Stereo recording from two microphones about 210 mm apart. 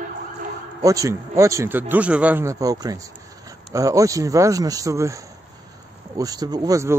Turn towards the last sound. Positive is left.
turn(degrees=-15)  # may be behind; listen again after turning